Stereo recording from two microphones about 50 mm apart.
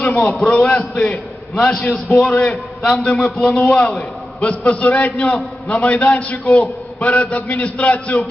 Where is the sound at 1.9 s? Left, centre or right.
Centre.